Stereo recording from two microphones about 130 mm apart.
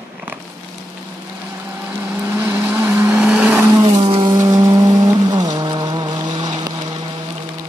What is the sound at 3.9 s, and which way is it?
Vehicle, 50° right (ahead or behind).